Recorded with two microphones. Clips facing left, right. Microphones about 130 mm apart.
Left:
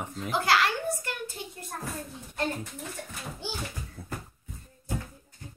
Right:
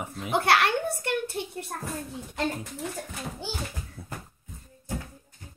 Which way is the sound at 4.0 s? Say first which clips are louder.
Left 3 dB; centre (ahead or behind).